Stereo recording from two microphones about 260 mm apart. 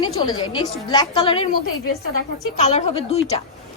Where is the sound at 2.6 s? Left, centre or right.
Left.